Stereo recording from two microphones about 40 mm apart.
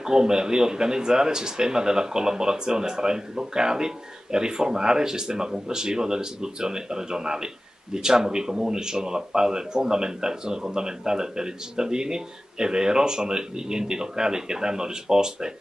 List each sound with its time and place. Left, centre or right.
0.0 s speech: centre